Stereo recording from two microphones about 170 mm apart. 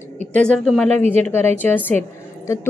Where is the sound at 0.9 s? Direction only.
40° right (ahead or behind).